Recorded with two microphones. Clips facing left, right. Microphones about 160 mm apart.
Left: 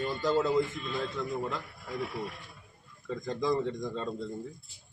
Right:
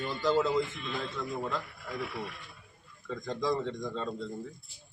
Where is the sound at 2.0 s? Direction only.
40° left (ahead or behind).